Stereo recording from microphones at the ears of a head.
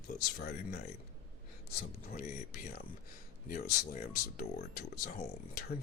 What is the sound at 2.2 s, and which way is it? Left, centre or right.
Speech, left.